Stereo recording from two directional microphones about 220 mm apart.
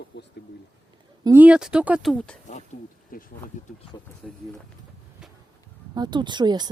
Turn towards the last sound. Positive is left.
turn(degrees=-20)  # may be behind; listen again after turning